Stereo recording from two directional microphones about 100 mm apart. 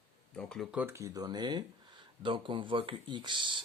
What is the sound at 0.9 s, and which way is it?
Speech, 30° right (ahead or behind).